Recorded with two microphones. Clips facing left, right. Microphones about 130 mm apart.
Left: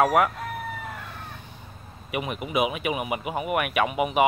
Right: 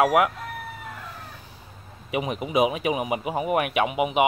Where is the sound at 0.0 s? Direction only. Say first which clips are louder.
Right 1 dB; 10° right (ahead or behind).